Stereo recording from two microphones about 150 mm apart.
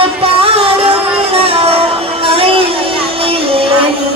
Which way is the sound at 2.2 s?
40° right (ahead or behind).